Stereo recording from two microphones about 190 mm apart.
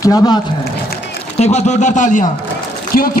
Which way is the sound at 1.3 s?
35° left (ahead or behind).